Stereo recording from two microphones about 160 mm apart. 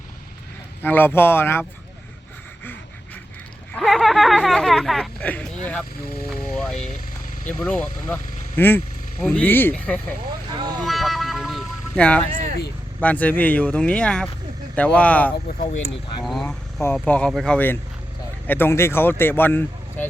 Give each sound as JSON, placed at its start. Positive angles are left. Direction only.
{"t": 0.8, "sound": "speech", "side_deg": 10}
{"t": 3.7, "sound": "speech", "side_deg": 0}
{"t": 10.5, "sound": "vehicle", "side_deg": -30}
{"t": 10.8, "sound": "vehicle", "side_deg": 0}
{"t": 13.0, "sound": "speech", "side_deg": 10}
{"t": 15.5, "sound": "speech", "side_deg": 65}
{"t": 16.2, "sound": "vehicle", "side_deg": 0}
{"t": 17.0, "sound": "speech", "side_deg": 5}